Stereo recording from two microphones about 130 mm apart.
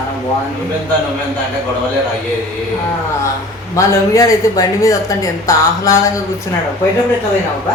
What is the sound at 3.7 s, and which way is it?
Speech, 25° left (ahead or behind).